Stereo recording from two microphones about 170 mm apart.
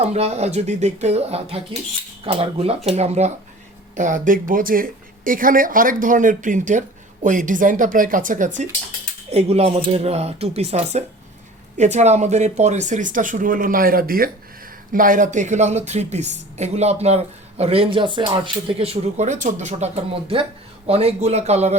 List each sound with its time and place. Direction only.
0.0 s speech: 40° right (ahead or behind)
9.3 s speech: 35° right (ahead or behind)